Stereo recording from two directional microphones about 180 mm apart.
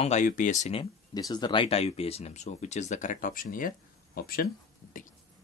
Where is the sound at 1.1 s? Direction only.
25° left (ahead or behind); by 4.4 s 55° left (ahead or behind).